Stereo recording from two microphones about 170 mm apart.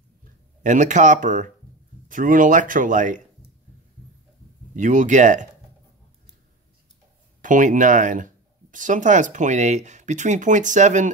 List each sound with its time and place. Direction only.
0.7 s speech: 45° right (ahead or behind)
4.7 s speech: 50° right (ahead or behind)
7.4 s speech: 50° right (ahead or behind)